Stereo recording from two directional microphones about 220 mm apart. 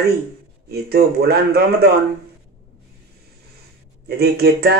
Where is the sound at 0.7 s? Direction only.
45° right (ahead or behind).